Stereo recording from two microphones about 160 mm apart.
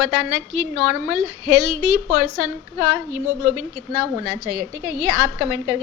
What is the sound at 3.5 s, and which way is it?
A woman's voice, 15° right (ahead or behind).